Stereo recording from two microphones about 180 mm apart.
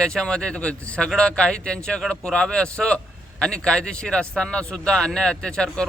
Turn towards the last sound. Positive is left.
turn(degrees=5)  # may be behind; listen again after turning